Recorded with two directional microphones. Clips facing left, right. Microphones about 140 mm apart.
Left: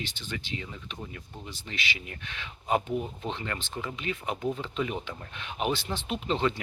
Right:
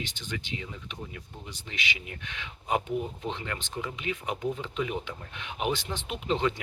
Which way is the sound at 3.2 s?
10° right (ahead or behind).